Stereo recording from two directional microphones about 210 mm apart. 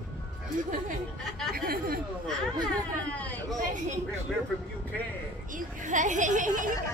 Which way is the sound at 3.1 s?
5° left (ahead or behind).